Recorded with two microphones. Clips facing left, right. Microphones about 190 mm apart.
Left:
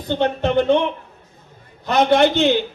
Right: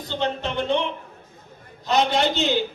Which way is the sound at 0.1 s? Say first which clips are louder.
Left 8 dB; 55° left (ahead or behind).